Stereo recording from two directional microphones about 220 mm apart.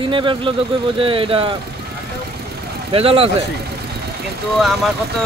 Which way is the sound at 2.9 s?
25° right (ahead or behind).